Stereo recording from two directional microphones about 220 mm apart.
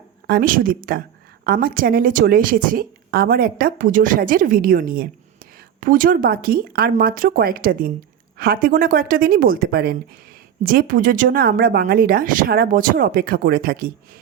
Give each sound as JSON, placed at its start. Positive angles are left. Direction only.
{"t": 0.3, "sound": "a woman's voice", "side_deg": -40}